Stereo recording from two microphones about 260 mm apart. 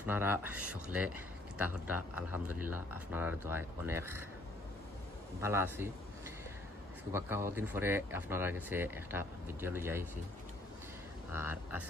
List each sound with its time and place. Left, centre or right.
0.0 s speech: centre
5.4 s speech: centre
7.1 s speech: centre
11.3 s speech: centre